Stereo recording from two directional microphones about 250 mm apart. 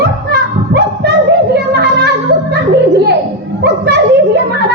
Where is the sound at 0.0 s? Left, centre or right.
Right.